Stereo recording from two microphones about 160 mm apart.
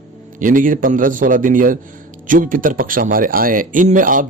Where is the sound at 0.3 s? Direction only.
55° right (ahead or behind).